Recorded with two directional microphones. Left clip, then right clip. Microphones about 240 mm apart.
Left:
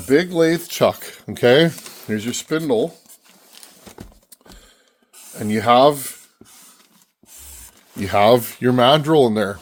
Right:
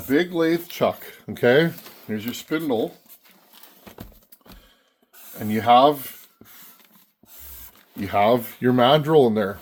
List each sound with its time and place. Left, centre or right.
0.1 s speech: left
2.0 s speech: left
5.4 s speech: left
7.9 s speech: left